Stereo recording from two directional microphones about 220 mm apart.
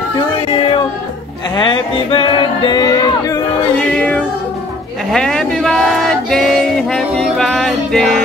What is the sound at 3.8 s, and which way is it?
Music, 5° left (ahead or behind).